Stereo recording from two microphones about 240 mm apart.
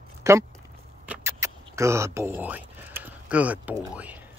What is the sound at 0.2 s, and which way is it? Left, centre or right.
Speech, centre.